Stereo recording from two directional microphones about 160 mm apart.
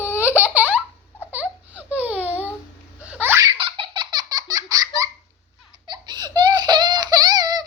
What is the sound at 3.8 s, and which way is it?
Laughter, 25° right (ahead or behind).